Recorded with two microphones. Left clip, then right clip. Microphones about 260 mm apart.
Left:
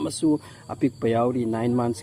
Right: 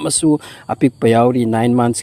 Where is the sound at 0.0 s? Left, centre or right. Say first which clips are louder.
Right 8 dB; right.